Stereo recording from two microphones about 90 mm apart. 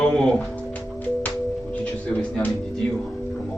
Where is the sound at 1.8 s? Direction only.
15° left (ahead or behind).